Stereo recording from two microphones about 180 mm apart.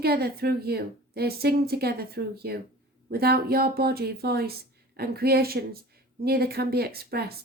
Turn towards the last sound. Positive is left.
turn(degrees=-60)  # may be behind; listen again after turning